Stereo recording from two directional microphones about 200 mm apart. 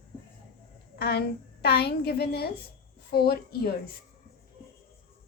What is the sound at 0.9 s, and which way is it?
A woman's voice, 55° left (ahead or behind).